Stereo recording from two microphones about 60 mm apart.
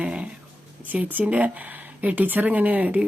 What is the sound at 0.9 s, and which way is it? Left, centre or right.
Speech, right.